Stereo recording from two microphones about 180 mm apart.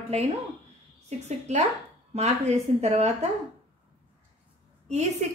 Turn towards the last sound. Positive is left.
turn(degrees=-40)  # may be behind; listen again after turning